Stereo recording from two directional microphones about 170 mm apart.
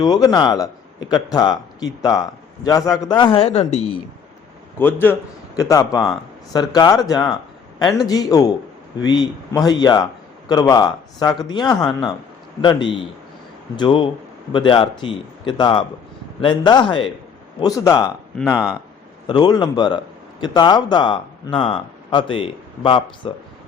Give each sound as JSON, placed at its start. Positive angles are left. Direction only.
{"t": 0.0, "sound": "speech", "side_deg": 25}
{"t": 4.8, "sound": "a man's voice", "side_deg": 10}
{"t": 18.5, "sound": "speech", "side_deg": -5}
{"t": 19.3, "sound": "speech", "side_deg": 25}